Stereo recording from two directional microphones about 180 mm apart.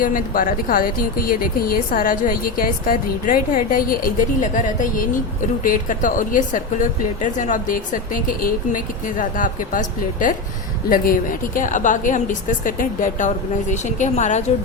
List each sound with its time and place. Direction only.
0.0 s speech: 50° left (ahead or behind)